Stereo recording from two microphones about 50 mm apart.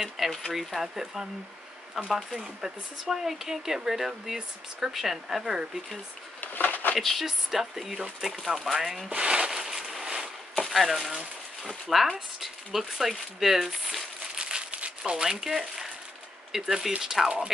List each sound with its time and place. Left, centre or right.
0.0 s speech: centre
6.4 s a sound: left
7.0 s speech: centre
9.1 s speech: centre
9.5 s a sound: centre
10.5 s speech: centre
14.4 s crumpling: right
15.2 s speech: centre